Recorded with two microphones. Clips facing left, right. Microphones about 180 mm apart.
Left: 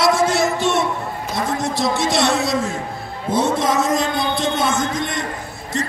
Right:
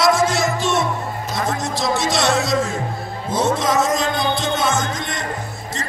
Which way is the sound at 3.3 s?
60° left (ahead or behind).